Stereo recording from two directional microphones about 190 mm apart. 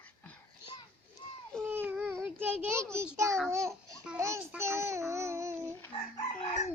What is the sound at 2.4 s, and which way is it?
Child singing, 10° right (ahead or behind).